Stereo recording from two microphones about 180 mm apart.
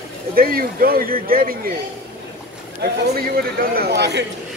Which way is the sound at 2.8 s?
55° right (ahead or behind).